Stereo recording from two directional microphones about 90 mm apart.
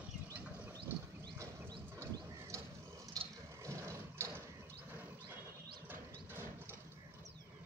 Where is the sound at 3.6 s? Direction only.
35° right (ahead or behind).